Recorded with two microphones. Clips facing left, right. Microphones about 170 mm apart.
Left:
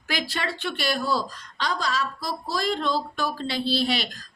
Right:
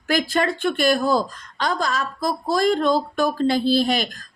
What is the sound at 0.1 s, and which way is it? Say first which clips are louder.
A woman's voice: right 9 dB; 50° right (ahead or behind).